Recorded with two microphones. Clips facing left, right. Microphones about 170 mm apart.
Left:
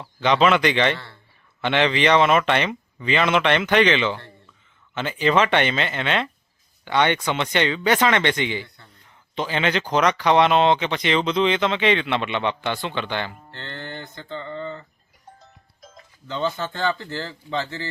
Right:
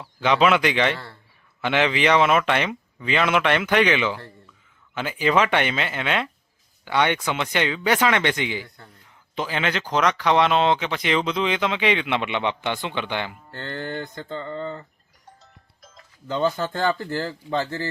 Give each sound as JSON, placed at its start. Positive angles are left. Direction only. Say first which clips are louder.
{"t": 0.0, "sound": "speech", "louder": "left 1 dB", "side_deg": -5}
{"t": 14.2, "sound": "a sound", "louder": "right 1 dB", "side_deg": -40}
{"t": 16.3, "sound": "speech", "louder": "right 3 dB", "side_deg": -40}